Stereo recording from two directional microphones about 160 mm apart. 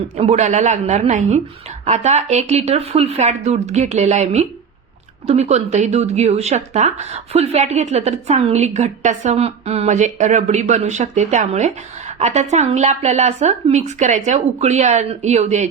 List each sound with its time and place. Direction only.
0.2 s speech: 45° right (ahead or behind)